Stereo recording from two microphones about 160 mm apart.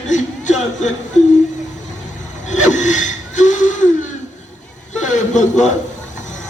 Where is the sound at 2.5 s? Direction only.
50° left (ahead or behind).